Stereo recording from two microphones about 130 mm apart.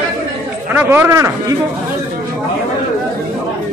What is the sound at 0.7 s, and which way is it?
Speech, 15° right (ahead or behind).